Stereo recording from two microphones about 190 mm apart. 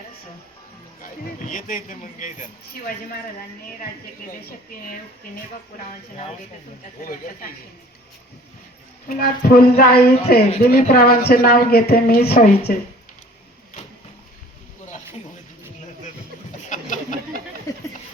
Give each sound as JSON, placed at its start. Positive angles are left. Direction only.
{"t": 1.0, "sound": "a woman's voice", "side_deg": 45}
{"t": 7.0, "sound": "a woman's voice", "side_deg": 45}
{"t": 9.0, "sound": "a woman's voice", "side_deg": 50}
{"t": 16.6, "sound": "a sound", "side_deg": 40}